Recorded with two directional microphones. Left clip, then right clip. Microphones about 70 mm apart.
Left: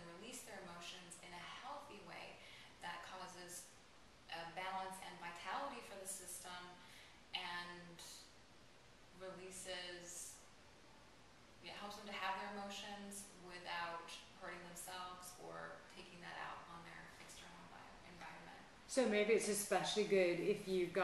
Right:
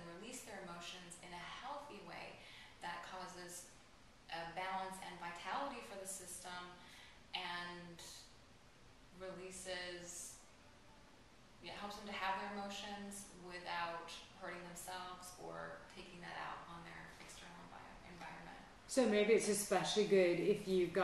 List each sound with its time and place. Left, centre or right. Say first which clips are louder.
0.2 s a sound: right 1 dB; centre
9.2 s a woman's voice: right 3 dB; centre
11.6 s a woman's voice: right 2 dB; centre
16.2 s music: right 2 dB; centre
19.0 s a woman's voice: right 3 dB; right